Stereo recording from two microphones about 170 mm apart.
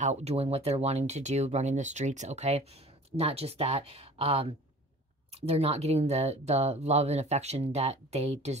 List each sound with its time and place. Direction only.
0.0 s speech: 40° right (ahead or behind)